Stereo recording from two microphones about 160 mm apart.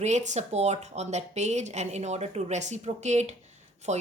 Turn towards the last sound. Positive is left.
turn(degrees=-45)  # may be behind; listen again after turning